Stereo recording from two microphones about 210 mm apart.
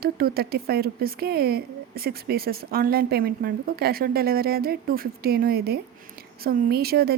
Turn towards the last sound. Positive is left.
turn(degrees=-45)  # may be behind; listen again after turning